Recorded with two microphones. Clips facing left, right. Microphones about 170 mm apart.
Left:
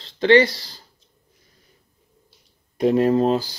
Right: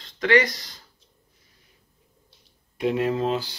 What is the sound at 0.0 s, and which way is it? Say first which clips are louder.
Speech: left 6 dB; 30° left (ahead or behind).